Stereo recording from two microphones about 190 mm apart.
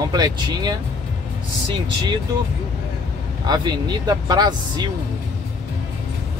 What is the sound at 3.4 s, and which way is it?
Speech, 20° right (ahead or behind).